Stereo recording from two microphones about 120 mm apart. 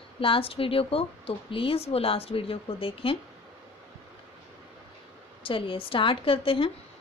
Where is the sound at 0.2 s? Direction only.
50° left (ahead or behind).